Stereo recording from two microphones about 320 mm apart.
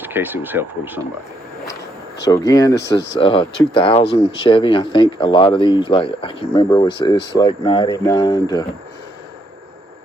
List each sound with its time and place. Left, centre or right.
0.0 s speech: centre
2.2 s speech: centre